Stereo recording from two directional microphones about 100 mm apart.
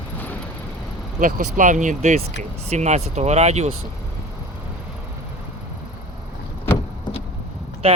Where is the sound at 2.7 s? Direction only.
90° right.